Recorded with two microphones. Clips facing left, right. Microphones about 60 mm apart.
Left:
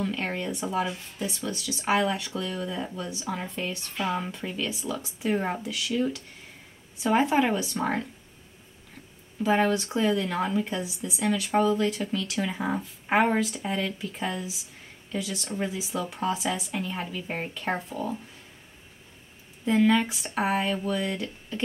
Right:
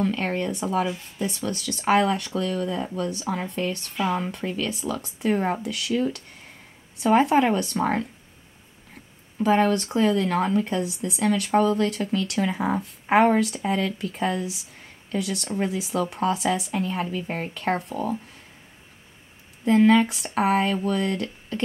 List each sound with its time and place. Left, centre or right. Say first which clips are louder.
0.0 s speech: right 5 dB; right
9.4 s speech: right 3 dB; right
20.3 s speech: right 5 dB; right